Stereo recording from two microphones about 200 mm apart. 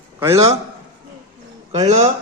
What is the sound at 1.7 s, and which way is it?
Speech, 30° right (ahead or behind).